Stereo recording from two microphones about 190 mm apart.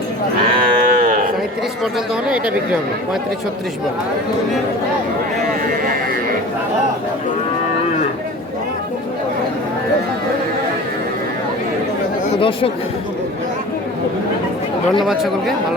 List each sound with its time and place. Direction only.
0.6 s moo: 45° right (ahead or behind)
12.4 s speech: 30° left (ahead or behind)
15.0 s speech: centre (ahead or behind)